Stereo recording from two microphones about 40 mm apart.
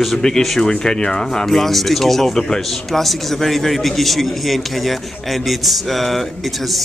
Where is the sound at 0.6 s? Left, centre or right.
Centre.